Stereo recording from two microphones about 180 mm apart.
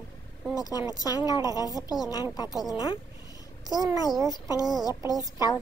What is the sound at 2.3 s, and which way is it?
Speech, 20° left (ahead or behind).